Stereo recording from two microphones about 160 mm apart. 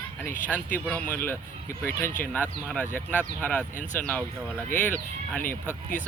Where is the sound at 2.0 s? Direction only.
60° left (ahead or behind).